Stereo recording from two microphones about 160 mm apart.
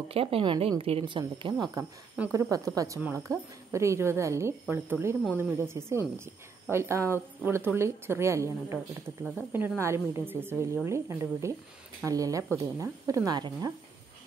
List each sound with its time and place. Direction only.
0.1 s a woman's voice: 35° right (ahead or behind)